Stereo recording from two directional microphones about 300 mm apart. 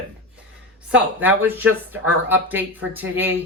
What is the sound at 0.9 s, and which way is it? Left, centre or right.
Speech, centre.